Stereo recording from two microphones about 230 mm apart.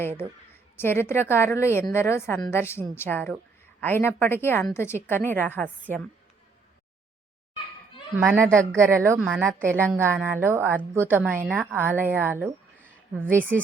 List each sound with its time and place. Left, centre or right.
0.8 s a woman's voice: centre
8.2 s a woman's voice: centre